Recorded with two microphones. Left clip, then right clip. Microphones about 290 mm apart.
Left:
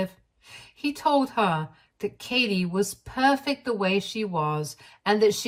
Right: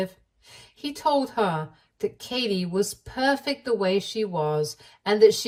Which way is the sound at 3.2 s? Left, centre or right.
Centre.